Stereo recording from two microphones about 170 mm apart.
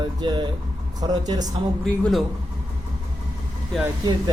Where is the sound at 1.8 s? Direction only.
5° left (ahead or behind).